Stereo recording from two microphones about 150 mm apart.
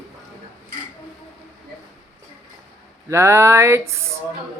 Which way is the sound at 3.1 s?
20° right (ahead or behind).